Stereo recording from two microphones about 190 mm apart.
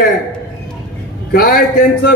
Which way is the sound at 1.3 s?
55° left (ahead or behind).